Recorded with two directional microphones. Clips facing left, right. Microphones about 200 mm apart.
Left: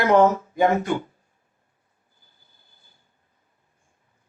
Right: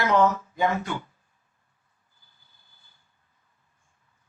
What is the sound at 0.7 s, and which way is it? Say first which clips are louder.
Speech: left 7 dB; 15° left (ahead or behind).